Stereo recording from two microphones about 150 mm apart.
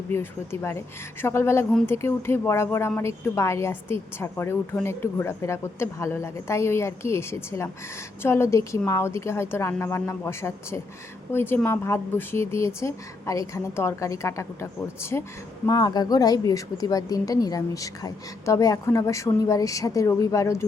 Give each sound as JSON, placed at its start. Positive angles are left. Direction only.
{"t": 0.1, "sound": "a woman's voice", "side_deg": 15}